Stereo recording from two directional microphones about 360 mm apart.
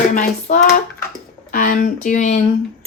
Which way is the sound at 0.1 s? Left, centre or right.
Left.